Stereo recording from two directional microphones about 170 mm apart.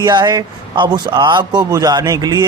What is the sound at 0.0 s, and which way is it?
A man's voice, 25° right (ahead or behind).